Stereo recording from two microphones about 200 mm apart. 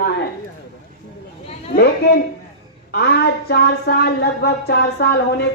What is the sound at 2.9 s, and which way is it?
Speech, 55° left (ahead or behind).